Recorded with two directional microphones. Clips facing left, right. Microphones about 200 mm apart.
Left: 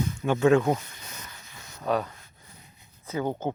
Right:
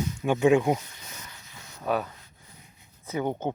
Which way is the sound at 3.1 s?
20° right (ahead or behind).